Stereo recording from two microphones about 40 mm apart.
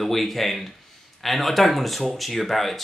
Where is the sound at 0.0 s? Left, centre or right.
Centre.